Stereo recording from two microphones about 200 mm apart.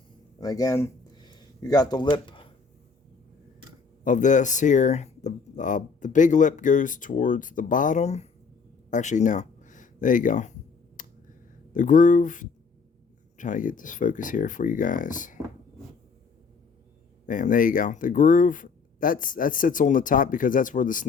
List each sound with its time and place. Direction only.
0.3 s speech: 15° left (ahead or behind)
4.0 s speech: 40° left (ahead or behind)
11.0 s a sound: 40° left (ahead or behind)
11.7 s speech: 40° left (ahead or behind)
17.2 s speech: 40° left (ahead or behind)